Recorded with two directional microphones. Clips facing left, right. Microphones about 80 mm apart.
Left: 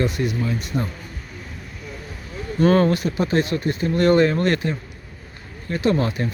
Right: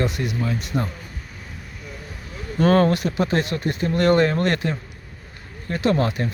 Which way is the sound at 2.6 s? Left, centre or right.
Right.